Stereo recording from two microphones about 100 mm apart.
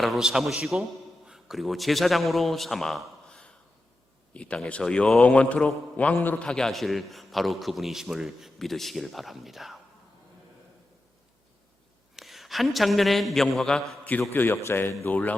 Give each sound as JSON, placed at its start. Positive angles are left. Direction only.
{"t": 0.0, "sound": "a man's voice", "side_deg": -5}
{"t": 12.1, "sound": "a man's voice", "side_deg": 0}
{"t": 14.0, "sound": "a man's voice", "side_deg": 15}